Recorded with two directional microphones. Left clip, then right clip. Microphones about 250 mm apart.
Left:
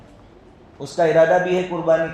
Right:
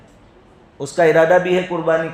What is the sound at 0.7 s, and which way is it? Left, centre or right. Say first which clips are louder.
A man's voice: right 2 dB; right.